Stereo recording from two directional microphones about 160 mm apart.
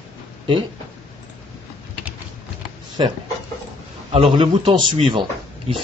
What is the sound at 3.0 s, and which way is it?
A man's voice, 30° right (ahead or behind).